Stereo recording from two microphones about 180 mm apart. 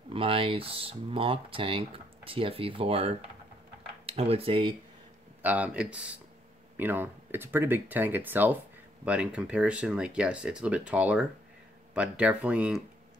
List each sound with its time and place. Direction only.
0.1 s speech: 30° right (ahead or behind)
5.4 s speech: 10° right (ahead or behind)